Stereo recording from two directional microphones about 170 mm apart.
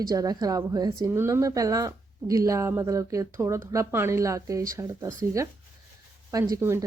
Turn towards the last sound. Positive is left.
turn(degrees=-15)  # may be behind; listen again after turning